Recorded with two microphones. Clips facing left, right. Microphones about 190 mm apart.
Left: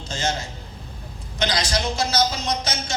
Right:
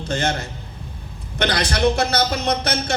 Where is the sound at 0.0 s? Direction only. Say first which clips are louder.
Right 4 dB; 60° right (ahead or behind).